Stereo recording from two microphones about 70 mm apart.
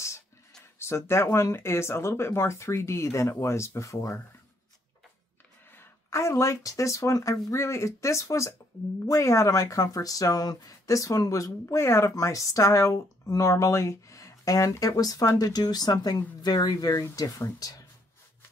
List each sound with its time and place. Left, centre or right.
0.7 s speech: left
5.7 s speech: left